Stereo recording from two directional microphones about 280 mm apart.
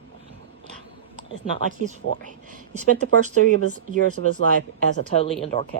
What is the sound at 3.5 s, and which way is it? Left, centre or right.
Speech, right.